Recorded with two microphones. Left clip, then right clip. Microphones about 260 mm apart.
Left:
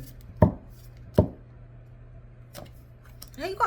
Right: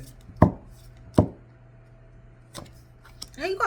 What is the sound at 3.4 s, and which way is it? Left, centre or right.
Speech, centre.